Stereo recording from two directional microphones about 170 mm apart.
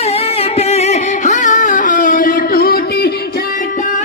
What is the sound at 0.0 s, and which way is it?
Music, 35° left (ahead or behind).